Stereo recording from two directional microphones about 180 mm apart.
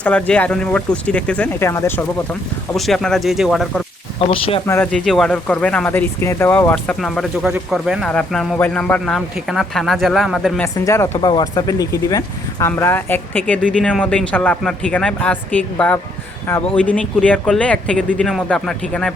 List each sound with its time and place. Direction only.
0.0 s speech: 5° left (ahead or behind)
2.7 s a man's voice: centre (ahead or behind)
4.3 s speech: 30° left (ahead or behind)
4.6 s speech: 15° left (ahead or behind)
4.9 s a man's voice: 5° left (ahead or behind)
10.8 s a man's voice: 15° left (ahead or behind)